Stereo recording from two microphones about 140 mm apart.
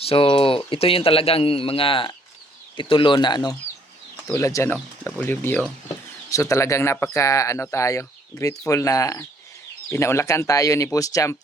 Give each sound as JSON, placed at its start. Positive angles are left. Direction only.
{"t": 0.0, "sound": "speech", "side_deg": 40}